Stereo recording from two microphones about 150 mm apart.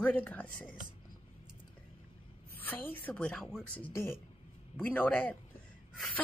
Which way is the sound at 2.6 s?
10° left (ahead or behind).